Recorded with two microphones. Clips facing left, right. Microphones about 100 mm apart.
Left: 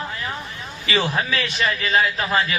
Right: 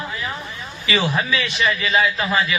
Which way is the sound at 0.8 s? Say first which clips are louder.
Right 1 dB; 50° left (ahead or behind).